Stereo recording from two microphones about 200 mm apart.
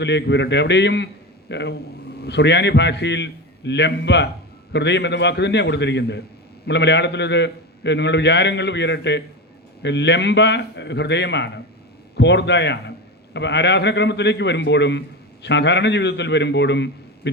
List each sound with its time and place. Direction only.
0.0 s a man's voice: 60° left (ahead or behind)